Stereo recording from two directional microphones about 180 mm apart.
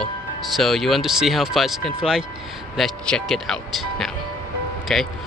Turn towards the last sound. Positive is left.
turn(degrees=0)  # may be behind; listen again after turning